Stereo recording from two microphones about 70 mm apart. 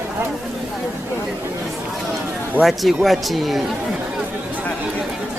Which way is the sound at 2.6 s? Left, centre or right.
Right.